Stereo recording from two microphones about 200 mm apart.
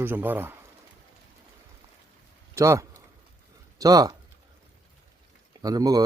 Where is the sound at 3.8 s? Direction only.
20° right (ahead or behind).